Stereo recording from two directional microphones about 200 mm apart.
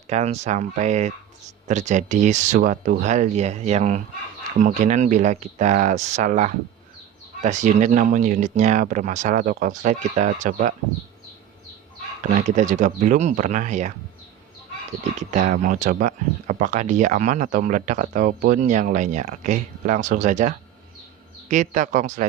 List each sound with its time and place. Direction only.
0.1 s speech: 35° right (ahead or behind)
12.5 s speech: 35° right (ahead or behind)
15.3 s speech: 35° right (ahead or behind)
21.5 s speech: 40° right (ahead or behind)